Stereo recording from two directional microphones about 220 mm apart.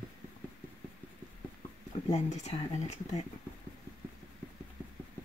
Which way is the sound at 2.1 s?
30° left (ahead or behind).